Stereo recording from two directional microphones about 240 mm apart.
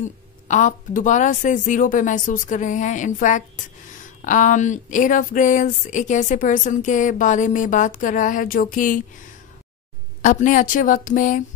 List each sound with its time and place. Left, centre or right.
0.0 s speech: left
10.2 s speech: left